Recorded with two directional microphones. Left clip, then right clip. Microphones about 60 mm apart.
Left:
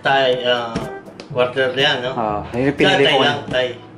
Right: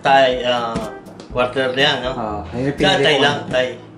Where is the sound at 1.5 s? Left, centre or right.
Right.